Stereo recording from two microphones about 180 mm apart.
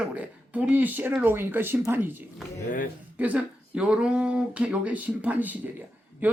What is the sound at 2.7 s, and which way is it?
Speech, 50° left (ahead or behind).